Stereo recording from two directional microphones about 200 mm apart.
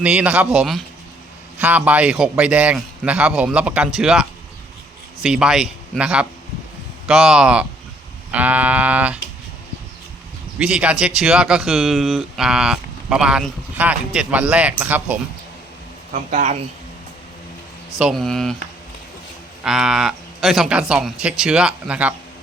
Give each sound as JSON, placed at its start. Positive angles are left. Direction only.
{"t": 0.0, "sound": "a man's voice", "side_deg": -5}
{"t": 10.6, "sound": "speech", "side_deg": -5}
{"t": 16.1, "sound": "speech", "side_deg": -40}
{"t": 18.0, "sound": "speech", "side_deg": 0}
{"t": 19.6, "sound": "speech", "side_deg": -5}